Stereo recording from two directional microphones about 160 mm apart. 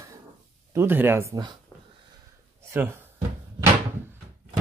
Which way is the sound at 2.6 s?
15° right (ahead or behind).